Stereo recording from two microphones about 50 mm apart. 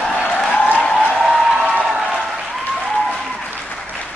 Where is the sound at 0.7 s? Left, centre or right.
Left.